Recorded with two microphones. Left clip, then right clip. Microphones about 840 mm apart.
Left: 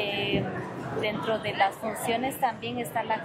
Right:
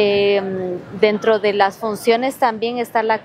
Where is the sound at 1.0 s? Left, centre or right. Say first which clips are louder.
Right 15 dB; right.